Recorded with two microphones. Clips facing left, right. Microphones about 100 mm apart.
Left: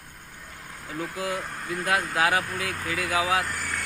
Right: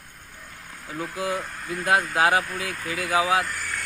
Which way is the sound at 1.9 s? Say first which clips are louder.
Right 4 dB; 30° right (ahead or behind).